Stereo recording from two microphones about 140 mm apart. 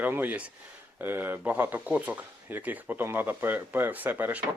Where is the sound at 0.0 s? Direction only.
10° right (ahead or behind).